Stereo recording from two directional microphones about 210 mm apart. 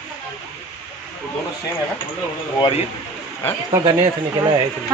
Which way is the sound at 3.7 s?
15° right (ahead or behind).